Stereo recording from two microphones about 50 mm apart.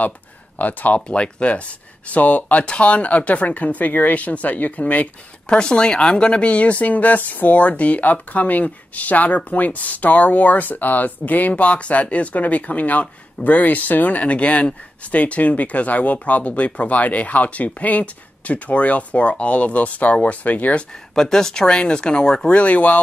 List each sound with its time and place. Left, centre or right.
0.6 s speech: left
5.6 s speech: centre
21.1 s speech: centre; by 22.9 s left